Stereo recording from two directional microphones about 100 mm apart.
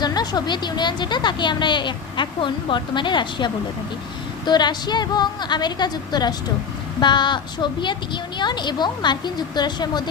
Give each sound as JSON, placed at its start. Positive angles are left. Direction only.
{"t": 0.0, "sound": "a woman's voice", "side_deg": 45}